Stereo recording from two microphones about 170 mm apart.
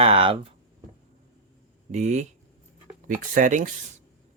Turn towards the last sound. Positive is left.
turn(degrees=-50)  # may be behind; listen again after turning